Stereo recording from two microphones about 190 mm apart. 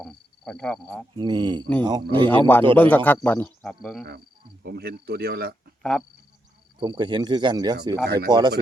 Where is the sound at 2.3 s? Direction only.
10° left (ahead or behind).